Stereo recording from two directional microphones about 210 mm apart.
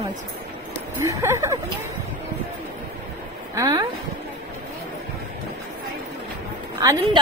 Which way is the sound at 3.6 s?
20° right (ahead or behind).